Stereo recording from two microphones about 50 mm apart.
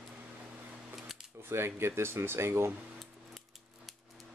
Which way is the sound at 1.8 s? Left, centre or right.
Right.